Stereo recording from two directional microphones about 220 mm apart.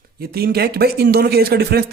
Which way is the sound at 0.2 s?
45° right (ahead or behind).